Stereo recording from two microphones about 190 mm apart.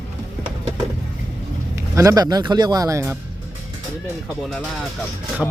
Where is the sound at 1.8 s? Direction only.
15° right (ahead or behind).